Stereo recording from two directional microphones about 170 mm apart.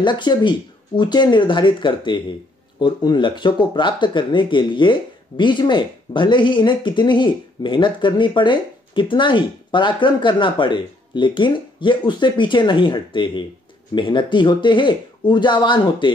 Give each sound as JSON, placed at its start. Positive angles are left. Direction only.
{"t": 0.0, "sound": "speech", "side_deg": 25}